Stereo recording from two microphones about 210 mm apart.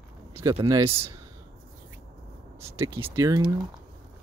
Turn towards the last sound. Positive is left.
turn(degrees=-15)  # may be behind; listen again after turning